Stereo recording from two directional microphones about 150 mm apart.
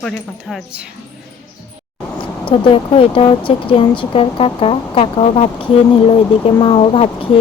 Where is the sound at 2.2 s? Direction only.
35° left (ahead or behind).